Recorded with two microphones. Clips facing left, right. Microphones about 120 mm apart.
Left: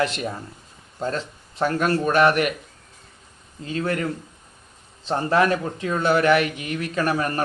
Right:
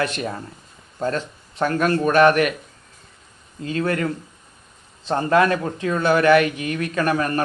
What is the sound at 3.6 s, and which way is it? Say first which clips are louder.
Speech: right 3 dB; 25° left (ahead or behind).